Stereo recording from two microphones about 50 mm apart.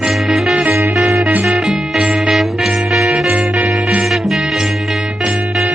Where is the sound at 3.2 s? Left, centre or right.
Right.